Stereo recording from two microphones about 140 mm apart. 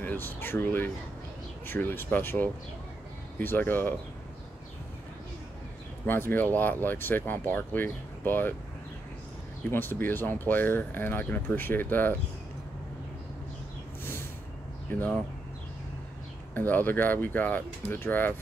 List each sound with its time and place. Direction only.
0.0 s speech: 15° left (ahead or behind)
6.0 s speech: 15° left (ahead or behind)
9.7 s speech: 15° left (ahead or behind)
14.9 s speech: 15° left (ahead or behind)
16.5 s speech: 15° left (ahead or behind)